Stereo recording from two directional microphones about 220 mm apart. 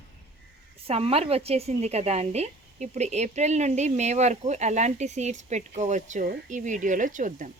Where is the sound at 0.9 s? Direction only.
25° right (ahead or behind).